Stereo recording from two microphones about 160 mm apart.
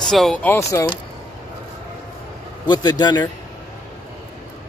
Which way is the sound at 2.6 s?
25° left (ahead or behind).